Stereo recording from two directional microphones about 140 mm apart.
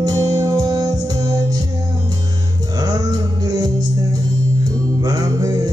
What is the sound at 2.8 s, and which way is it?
Music, 25° right (ahead or behind).